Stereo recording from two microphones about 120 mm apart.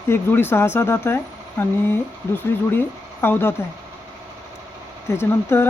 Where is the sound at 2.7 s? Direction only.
20° left (ahead or behind).